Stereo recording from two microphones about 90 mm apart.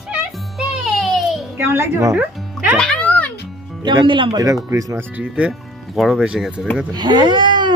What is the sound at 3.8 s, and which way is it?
Speech, 60° right (ahead or behind).